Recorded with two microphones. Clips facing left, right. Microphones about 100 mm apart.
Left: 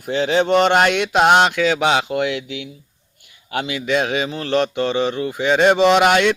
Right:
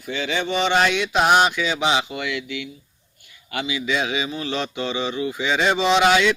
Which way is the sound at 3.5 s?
55° left (ahead or behind).